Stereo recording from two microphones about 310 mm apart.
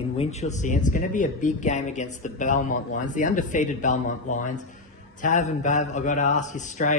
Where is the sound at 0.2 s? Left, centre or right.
Left.